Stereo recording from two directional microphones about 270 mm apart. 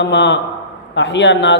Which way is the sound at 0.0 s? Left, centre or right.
Left.